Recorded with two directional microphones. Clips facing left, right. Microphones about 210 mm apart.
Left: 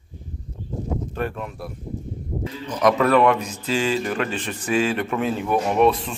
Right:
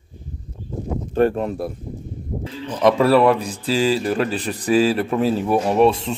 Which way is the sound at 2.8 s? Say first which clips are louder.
Right 3 dB; 30° right (ahead or behind).